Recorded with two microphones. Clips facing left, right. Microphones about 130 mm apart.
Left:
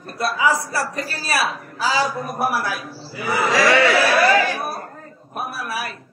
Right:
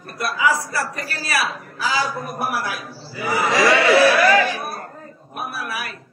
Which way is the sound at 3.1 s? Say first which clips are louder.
Even; 15° right (ahead or behind).